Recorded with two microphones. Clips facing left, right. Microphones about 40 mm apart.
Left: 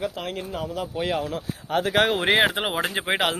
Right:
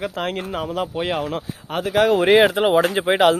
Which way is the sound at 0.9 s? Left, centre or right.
Right.